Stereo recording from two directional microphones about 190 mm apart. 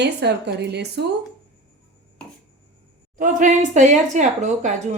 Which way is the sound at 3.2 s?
40° right (ahead or behind).